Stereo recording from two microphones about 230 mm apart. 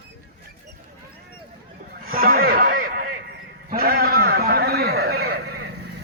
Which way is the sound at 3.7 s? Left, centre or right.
Right.